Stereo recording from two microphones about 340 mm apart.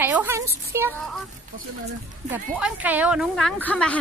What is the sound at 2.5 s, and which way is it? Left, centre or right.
A woman's voice, centre.